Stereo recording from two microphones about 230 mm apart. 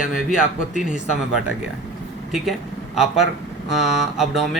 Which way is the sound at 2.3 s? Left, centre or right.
Centre.